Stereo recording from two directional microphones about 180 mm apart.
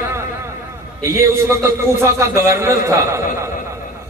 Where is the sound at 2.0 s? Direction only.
15° right (ahead or behind).